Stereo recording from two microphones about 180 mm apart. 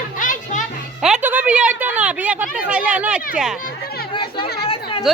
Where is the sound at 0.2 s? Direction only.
45° left (ahead or behind).